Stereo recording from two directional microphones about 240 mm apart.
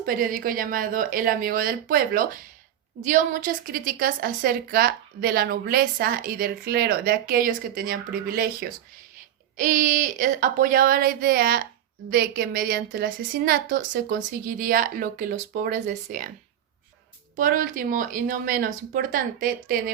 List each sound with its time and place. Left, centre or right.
0.0 s a woman's voice: right
17.3 s a woman's voice: right